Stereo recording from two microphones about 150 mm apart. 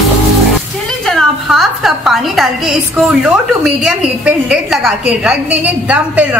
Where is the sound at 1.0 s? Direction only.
Centre (ahead or behind).